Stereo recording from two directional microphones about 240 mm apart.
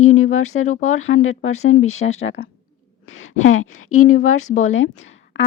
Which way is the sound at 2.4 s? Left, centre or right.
Left.